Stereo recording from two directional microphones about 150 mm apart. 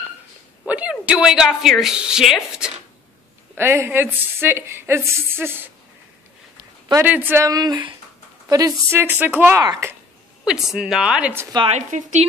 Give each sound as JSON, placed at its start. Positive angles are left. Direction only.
{"t": 0.7, "sound": "a woman's voice", "side_deg": -10}
{"t": 3.5, "sound": "a woman's voice", "side_deg": -15}
{"t": 7.0, "sound": "a woman's voice", "side_deg": -15}
{"t": 10.4, "sound": "a woman's voice", "side_deg": -5}
{"t": 11.7, "sound": "speech", "side_deg": -50}